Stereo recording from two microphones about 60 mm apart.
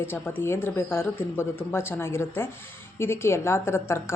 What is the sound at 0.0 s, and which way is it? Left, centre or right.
Speech, left.